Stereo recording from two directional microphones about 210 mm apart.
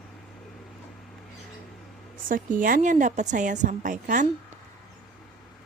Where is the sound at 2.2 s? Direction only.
40° right (ahead or behind).